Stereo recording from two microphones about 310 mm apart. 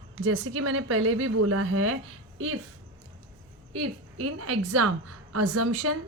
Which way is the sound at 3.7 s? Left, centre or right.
Right.